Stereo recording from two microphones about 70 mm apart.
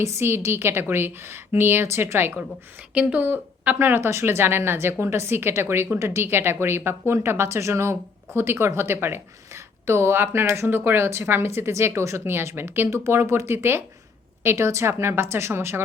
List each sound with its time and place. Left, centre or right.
0.0 s a woman's voice: right
2.9 s a woman's voice: centre; by 15.8 s right